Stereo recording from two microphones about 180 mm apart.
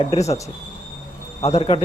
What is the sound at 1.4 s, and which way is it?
Speech, 35° left (ahead or behind).